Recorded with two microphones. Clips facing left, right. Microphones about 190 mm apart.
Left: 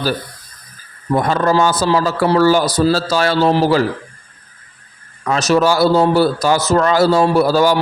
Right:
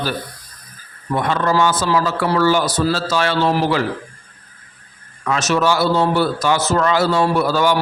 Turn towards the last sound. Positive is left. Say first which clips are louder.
# left 4 dB
turn(degrees=35)  # may be behind; listen again after turning